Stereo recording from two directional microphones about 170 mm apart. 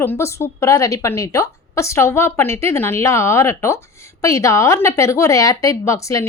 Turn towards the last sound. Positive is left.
turn(degrees=20)  # may be behind; listen again after turning